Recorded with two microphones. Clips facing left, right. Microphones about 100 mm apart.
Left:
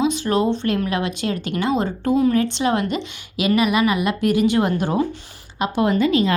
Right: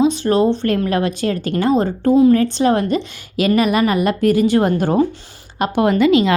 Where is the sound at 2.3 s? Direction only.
40° right (ahead or behind).